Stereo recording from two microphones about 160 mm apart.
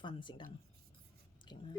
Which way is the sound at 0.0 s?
30° left (ahead or behind).